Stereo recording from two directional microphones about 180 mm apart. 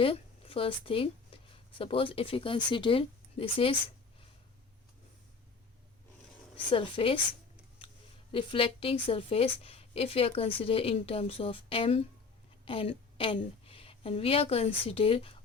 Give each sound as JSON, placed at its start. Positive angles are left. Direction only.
{"t": 0.0, "sound": "speech", "side_deg": 30}
{"t": 6.7, "sound": "speech", "side_deg": 30}
{"t": 8.3, "sound": "a woman's voice", "side_deg": 30}